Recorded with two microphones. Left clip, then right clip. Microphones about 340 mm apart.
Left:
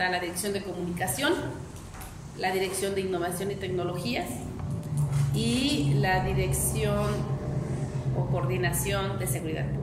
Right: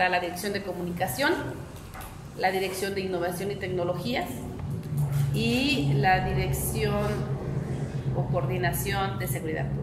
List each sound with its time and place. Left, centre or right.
0.0 s a woman's voice: centre
2.4 s a woman's voice: centre
5.4 s a woman's voice: centre
8.5 s a woman's voice: centre